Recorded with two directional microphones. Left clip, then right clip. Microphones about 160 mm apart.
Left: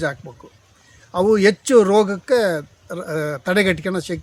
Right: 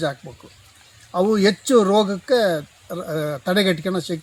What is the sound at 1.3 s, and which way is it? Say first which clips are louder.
Speech: left 4 dB; 5° left (ahead or behind).